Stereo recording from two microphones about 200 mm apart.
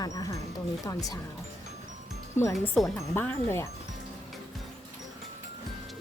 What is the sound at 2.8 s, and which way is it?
Speech, 10° left (ahead or behind).